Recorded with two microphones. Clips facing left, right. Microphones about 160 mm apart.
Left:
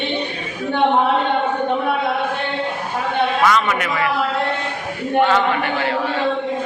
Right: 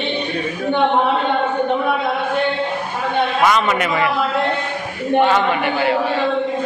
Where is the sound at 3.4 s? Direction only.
25° right (ahead or behind).